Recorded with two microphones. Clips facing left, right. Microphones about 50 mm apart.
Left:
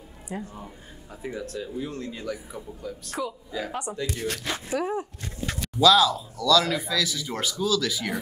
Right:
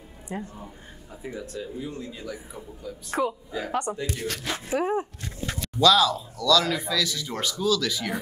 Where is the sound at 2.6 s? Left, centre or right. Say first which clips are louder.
Left 2 dB; centre.